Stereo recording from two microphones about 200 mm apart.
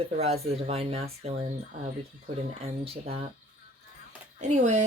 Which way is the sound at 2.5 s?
30° right (ahead or behind).